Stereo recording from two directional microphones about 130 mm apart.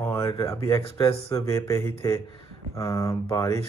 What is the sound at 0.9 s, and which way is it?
Speech, 25° left (ahead or behind).